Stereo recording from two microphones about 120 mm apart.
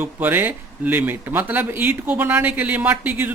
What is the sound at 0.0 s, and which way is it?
A man's voice, 15° right (ahead or behind).